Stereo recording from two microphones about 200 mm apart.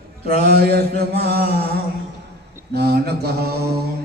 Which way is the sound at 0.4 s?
50° right (ahead or behind).